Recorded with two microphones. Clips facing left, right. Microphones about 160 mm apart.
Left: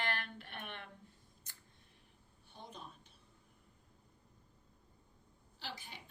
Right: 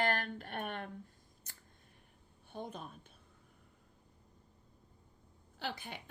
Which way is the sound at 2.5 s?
50° right (ahead or behind).